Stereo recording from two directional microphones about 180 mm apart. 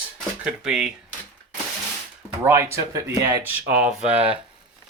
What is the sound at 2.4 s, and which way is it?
Speech, 15° right (ahead or behind).